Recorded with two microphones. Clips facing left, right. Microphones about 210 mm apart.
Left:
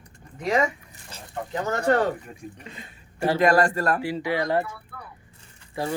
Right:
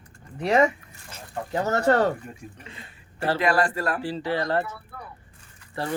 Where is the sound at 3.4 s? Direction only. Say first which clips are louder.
Left 4 dB; 45° left (ahead or behind).